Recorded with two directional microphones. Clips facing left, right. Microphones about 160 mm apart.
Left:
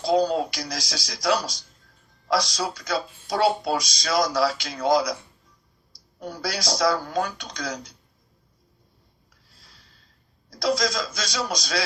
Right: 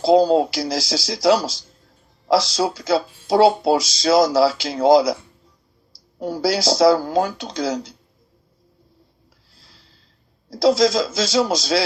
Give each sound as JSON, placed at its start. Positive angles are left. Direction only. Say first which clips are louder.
{"t": 0.0, "sound": "speech", "louder": "right 7 dB", "side_deg": -30}
{"t": 6.3, "sound": "speech", "louder": "right 9 dB", "side_deg": -30}
{"t": 10.5, "sound": "speech", "louder": "right 9 dB", "side_deg": -30}